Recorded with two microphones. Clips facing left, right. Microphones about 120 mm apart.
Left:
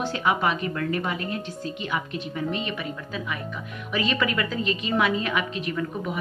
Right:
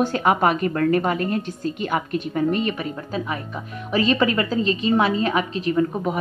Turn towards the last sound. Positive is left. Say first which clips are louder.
# right 8 dB
turn(degrees=-35)  # may be behind; listen again after turning